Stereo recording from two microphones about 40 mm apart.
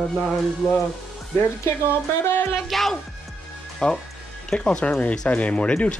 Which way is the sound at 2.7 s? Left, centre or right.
Centre.